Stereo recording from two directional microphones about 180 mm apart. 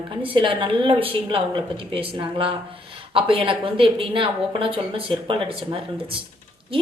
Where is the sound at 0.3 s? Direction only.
30° right (ahead or behind).